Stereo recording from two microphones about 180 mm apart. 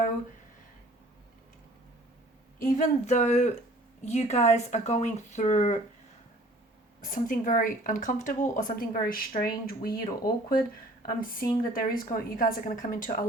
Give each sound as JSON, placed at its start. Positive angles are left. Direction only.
{"t": 2.6, "sound": "speech", "side_deg": 45}
{"t": 7.0, "sound": "speech", "side_deg": 45}
{"t": 11.0, "sound": "speech", "side_deg": 50}